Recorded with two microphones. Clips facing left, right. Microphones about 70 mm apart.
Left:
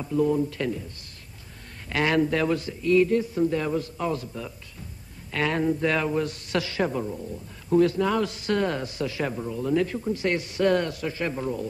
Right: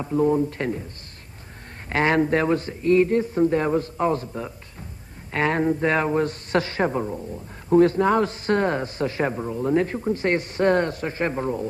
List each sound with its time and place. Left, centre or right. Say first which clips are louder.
0.0 s a man's voice: right 3 dB; right
1.9 s a man's voice: right 3 dB; right